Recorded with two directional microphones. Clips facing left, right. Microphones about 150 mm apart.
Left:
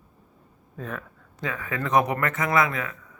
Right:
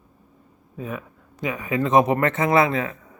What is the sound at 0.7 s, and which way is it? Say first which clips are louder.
A man's voice: right 3 dB; 10° right (ahead or behind).